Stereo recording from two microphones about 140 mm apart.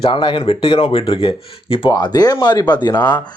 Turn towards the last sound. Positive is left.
turn(degrees=30)  # may be behind; listen again after turning